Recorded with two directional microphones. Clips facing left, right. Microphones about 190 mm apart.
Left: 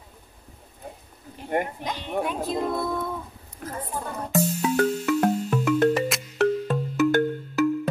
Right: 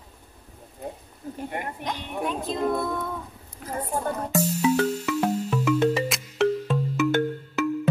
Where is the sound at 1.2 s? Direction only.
45° right (ahead or behind).